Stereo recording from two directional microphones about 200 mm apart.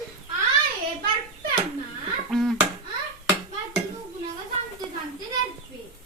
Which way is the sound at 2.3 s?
Centre (ahead or behind).